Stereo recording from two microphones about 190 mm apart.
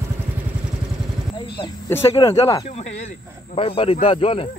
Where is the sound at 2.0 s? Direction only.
30° left (ahead or behind).